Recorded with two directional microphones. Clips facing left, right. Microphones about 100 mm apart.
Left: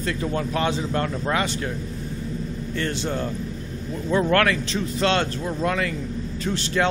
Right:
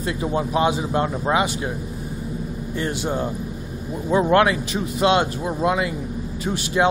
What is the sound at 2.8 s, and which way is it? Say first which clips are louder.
Speech: right 2 dB; 15° right (ahead or behind).